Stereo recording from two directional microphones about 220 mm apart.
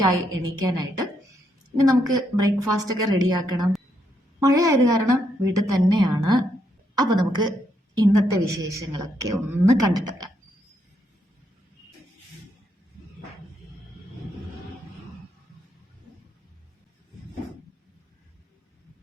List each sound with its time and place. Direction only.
0.6 s a woman's voice: 15° right (ahead or behind)